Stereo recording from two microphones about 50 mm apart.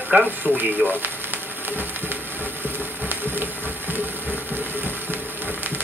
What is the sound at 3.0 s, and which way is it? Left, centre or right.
Music, right.